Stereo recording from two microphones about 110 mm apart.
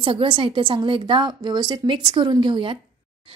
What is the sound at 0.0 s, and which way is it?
Speech, 50° right (ahead or behind).